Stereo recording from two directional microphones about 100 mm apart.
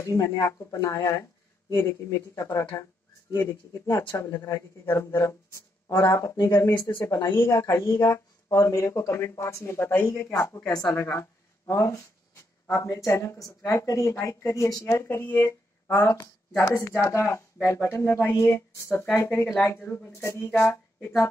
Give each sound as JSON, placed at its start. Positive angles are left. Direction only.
{"t": 0.0, "sound": "speech", "side_deg": 30}